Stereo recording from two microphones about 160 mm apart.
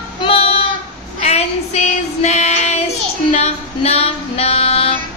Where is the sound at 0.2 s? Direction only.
35° left (ahead or behind).